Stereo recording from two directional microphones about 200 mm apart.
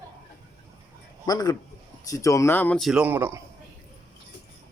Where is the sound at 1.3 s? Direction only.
20° left (ahead or behind); by 3.4 s 10° right (ahead or behind).